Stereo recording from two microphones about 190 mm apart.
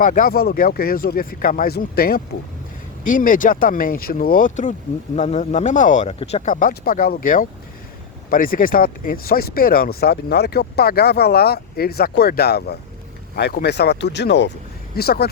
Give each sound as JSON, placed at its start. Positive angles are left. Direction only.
{"t": 0.0, "sound": "speech", "side_deg": 45}